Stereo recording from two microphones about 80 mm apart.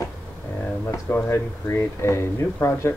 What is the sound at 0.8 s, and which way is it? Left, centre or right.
Speech, left.